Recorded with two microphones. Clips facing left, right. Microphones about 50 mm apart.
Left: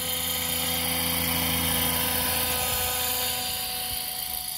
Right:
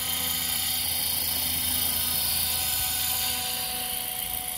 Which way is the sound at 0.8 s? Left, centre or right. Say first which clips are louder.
Left 6 dB; left.